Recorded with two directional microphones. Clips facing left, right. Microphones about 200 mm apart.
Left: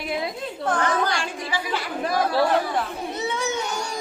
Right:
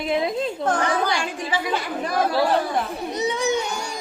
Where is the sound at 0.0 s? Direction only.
25° right (ahead or behind).